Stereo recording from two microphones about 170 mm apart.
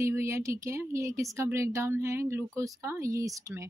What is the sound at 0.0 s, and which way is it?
A woman's voice, 15° right (ahead or behind).